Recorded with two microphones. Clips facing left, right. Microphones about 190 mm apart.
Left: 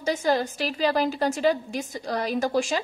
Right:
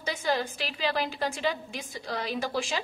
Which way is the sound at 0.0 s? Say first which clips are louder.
Left 6 dB; 40° left (ahead or behind).